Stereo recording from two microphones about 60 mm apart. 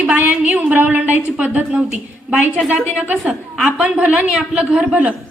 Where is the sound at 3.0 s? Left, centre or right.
Centre.